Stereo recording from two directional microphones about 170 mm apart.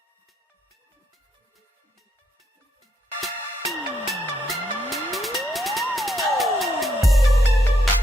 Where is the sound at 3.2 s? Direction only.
Centre (ahead or behind).